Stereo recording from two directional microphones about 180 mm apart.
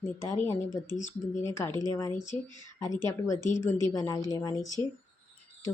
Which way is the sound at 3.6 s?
15° left (ahead or behind).